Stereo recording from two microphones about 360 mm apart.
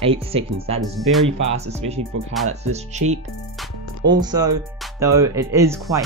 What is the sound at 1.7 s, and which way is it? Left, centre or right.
Speech, centre.